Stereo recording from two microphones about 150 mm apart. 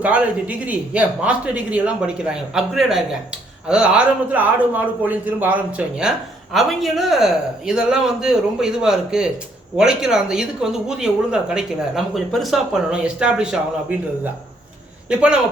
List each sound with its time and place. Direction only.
0.0 s a man's voice: 10° right (ahead or behind)